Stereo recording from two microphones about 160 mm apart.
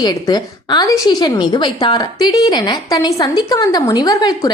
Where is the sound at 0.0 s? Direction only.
25° left (ahead or behind).